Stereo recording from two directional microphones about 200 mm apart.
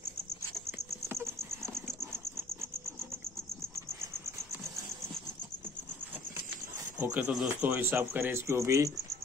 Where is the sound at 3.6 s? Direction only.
15° right (ahead or behind).